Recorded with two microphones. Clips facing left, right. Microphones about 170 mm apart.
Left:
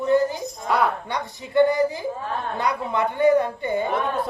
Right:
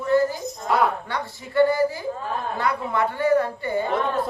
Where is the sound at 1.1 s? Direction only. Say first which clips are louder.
Left 1 dB; 20° left (ahead or behind).